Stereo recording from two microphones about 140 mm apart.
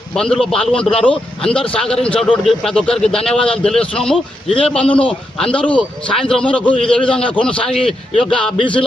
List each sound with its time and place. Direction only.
0.2 s a man's voice: 5° left (ahead or behind)
4.4 s a man's voice: 45° left (ahead or behind)
4.7 s a man's voice: 5° left (ahead or behind)
8.5 s music: 35° left (ahead or behind)